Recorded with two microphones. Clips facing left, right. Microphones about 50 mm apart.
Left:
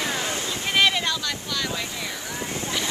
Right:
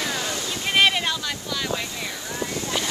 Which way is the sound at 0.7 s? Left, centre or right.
Centre.